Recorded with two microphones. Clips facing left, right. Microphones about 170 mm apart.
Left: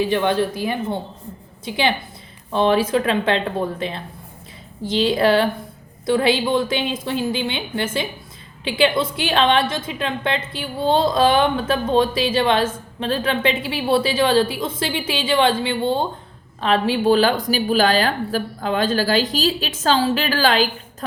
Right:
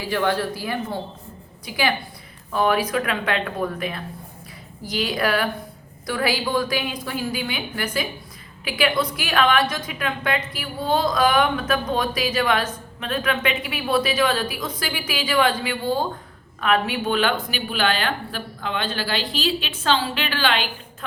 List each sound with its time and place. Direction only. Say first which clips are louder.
0.0 s a woman's voice: left 4 dB; 20° left (ahead or behind); by 20.7 s 40° left (ahead or behind)